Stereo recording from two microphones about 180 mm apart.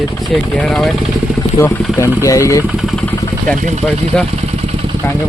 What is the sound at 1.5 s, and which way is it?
Speech, 15° left (ahead or behind).